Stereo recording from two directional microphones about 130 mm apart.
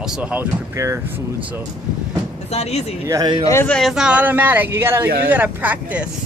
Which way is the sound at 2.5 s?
55° left (ahead or behind).